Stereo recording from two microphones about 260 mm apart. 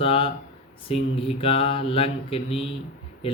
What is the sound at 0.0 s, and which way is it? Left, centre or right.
Speech, left.